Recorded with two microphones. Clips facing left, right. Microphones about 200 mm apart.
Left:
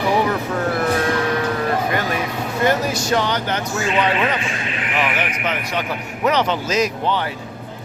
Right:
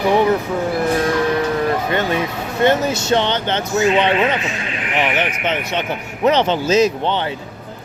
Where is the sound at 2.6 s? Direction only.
25° right (ahead or behind).